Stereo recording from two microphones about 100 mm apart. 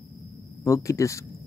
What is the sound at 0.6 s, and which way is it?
Speech, 30° left (ahead or behind).